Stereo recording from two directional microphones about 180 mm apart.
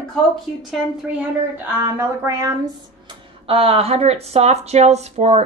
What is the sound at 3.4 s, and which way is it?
Speech, 30° right (ahead or behind).